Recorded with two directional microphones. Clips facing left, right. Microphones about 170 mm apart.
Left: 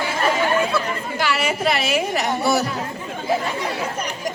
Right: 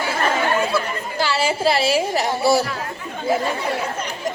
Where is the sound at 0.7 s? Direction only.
Centre (ahead or behind).